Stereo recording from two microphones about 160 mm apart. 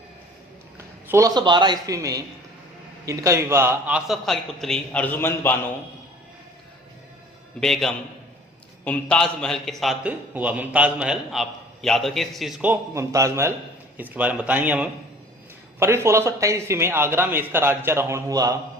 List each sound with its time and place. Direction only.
1.0 s a man's voice: 20° right (ahead or behind); by 5.5 s 15° left (ahead or behind)
7.6 s a man's voice: centre (ahead or behind)
12.7 s speech: 20° right (ahead or behind)